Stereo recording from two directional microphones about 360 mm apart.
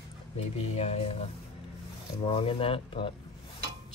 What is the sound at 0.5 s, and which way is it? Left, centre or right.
Speech, centre.